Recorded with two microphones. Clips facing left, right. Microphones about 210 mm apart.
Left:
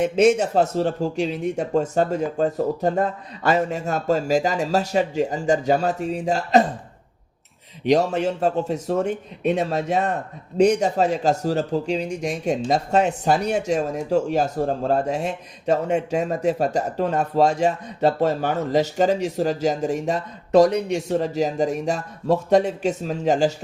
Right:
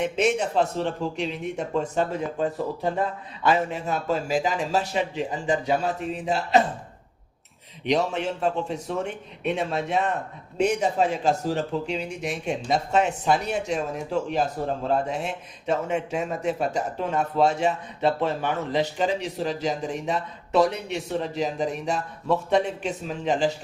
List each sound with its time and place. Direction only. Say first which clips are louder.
0.0 s a man's voice: left 6 dB; 40° left (ahead or behind)
7.9 s a man's voice: left 5 dB; 40° left (ahead or behind)